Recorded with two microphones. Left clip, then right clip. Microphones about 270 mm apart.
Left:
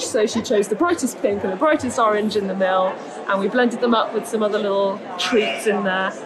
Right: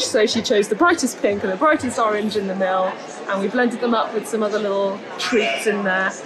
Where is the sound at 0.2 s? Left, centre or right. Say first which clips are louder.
Even; centre.